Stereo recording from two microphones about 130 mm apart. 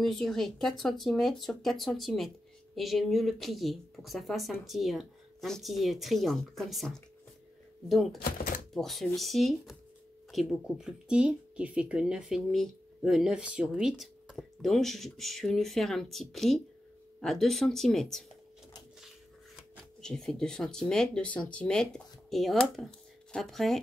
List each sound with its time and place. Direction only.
0.0 s speech: centre (ahead or behind)